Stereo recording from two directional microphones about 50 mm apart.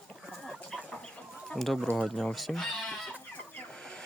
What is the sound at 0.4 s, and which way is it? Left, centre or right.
Chicken, centre.